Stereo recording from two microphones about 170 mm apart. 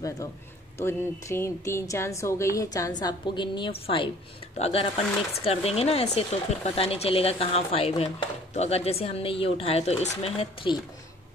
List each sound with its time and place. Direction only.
0.7 s a woman's voice: 15° left (ahead or behind); by 10.8 s 30° left (ahead or behind)